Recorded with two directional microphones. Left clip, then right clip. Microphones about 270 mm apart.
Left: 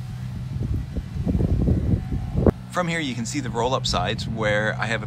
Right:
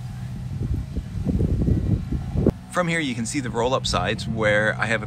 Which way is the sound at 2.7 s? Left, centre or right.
Centre.